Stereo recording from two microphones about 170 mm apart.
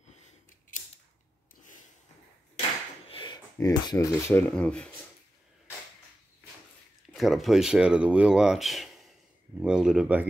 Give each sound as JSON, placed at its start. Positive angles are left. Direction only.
{"t": 3.1, "sound": "a sound", "side_deg": 30}
{"t": 3.5, "sound": "speech", "side_deg": 20}
{"t": 7.1, "sound": "speech", "side_deg": 0}